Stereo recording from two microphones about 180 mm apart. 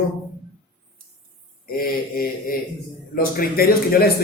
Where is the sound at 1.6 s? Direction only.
55° left (ahead or behind).